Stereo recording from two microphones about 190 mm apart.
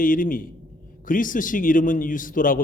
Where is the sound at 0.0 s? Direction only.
45° left (ahead or behind).